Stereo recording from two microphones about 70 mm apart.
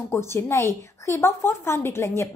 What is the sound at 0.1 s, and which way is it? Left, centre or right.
A woman's voice, left.